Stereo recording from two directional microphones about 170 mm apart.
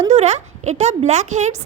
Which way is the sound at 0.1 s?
40° right (ahead or behind).